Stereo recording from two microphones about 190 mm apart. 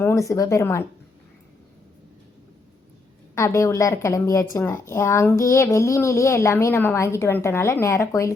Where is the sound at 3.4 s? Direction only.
15° left (ahead or behind).